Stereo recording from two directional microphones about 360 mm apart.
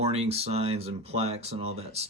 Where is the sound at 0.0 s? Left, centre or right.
Centre.